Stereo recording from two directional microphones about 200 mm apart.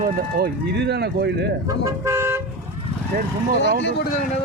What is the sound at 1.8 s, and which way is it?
Toot, 15° right (ahead or behind).